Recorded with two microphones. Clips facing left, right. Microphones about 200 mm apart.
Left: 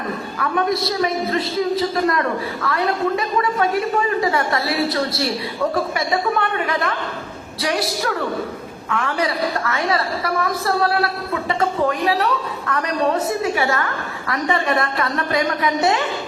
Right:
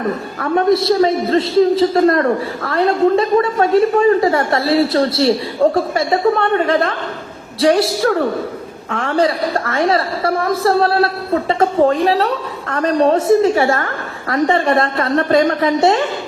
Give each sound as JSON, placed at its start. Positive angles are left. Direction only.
{"t": 0.5, "sound": "a woman's voice", "side_deg": -25}
{"t": 2.1, "sound": "a woman's voice", "side_deg": -50}
{"t": 2.6, "sound": "a woman's voice", "side_deg": -25}
{"t": 8.9, "sound": "a woman's voice", "side_deg": -30}